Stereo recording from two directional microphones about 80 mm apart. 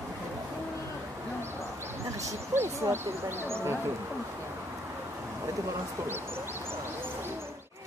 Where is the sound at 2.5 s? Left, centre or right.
Right.